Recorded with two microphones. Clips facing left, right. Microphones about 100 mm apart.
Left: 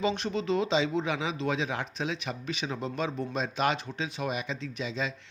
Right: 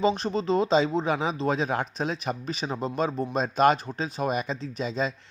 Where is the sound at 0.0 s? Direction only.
35° right (ahead or behind).